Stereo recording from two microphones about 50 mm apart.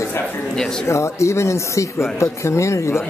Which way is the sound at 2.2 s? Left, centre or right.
Left.